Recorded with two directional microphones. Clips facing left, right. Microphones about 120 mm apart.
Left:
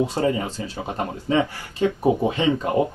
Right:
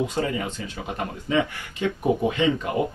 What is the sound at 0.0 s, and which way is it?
Speech, 35° left (ahead or behind).